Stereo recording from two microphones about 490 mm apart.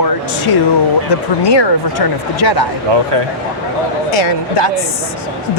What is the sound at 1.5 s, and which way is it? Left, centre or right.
Speech, left.